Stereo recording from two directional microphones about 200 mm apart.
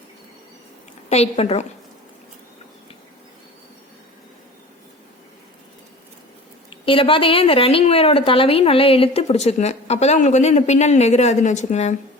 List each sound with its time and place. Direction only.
1.1 s a woman's voice: 30° left (ahead or behind)
6.8 s a woman's voice: 25° left (ahead or behind)